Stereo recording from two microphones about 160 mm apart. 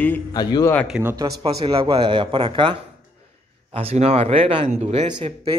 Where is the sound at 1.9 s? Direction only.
30° right (ahead or behind).